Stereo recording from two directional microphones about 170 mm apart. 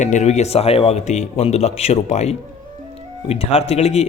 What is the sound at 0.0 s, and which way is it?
Speech, 45° left (ahead or behind).